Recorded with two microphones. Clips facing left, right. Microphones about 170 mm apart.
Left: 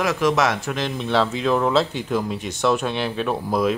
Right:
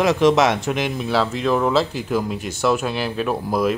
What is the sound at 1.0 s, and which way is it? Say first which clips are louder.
Speech: even; 5° right (ahead or behind).